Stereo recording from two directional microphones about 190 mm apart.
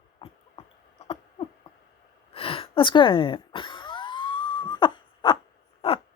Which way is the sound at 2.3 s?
30° left (ahead or behind).